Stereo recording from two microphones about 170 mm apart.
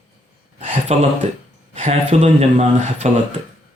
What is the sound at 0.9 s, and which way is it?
A man's voice, 40° right (ahead or behind).